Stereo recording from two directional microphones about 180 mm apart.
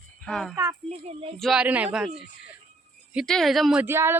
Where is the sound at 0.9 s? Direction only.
35° right (ahead or behind).